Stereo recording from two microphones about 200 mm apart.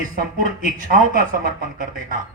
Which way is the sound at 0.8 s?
45° right (ahead or behind).